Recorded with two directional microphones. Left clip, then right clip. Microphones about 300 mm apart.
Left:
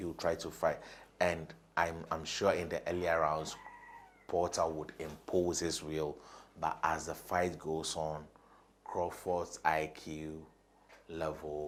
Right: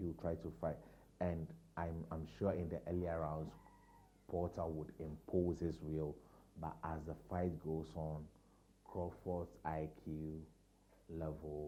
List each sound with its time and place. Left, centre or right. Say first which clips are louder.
0.0 s speech: left 9 dB; centre